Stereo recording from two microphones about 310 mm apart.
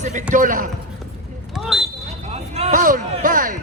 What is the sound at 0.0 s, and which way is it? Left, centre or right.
Speech, right.